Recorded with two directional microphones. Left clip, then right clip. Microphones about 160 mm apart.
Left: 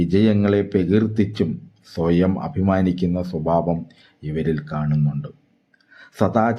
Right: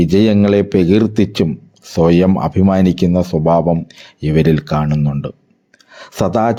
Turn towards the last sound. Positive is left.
turn(degrees=-45)  # may be behind; listen again after turning